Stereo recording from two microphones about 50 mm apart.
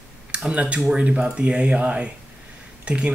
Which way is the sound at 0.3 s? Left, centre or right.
Right.